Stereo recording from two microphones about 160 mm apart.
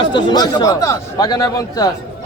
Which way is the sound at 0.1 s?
30° left (ahead or behind).